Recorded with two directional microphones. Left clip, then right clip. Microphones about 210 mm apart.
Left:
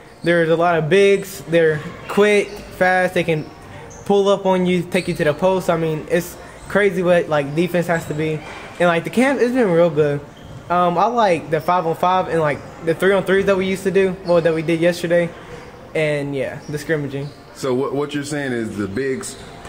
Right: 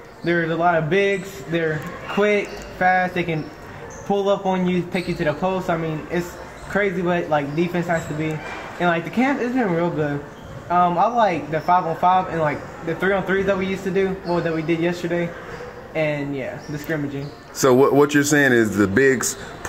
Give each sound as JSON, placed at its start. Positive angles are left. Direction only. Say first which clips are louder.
{"t": 0.2, "sound": "speech", "louder": "left 4 dB", "side_deg": 50}
{"t": 17.6, "sound": "a man's voice", "louder": "right 6 dB", "side_deg": -45}